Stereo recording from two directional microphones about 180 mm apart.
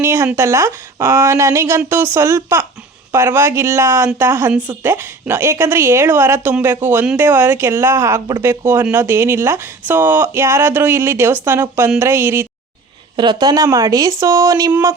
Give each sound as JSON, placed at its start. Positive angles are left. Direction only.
{"t": 0.0, "sound": "speech", "side_deg": -15}